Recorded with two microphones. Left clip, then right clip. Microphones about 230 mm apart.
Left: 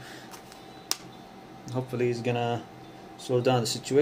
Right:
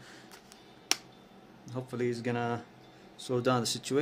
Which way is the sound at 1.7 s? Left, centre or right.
Centre.